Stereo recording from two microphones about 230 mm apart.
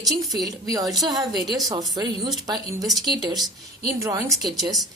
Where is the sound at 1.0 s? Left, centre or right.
Centre.